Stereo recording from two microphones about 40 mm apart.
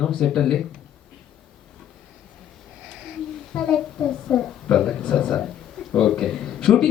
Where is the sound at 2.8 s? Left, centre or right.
Centre.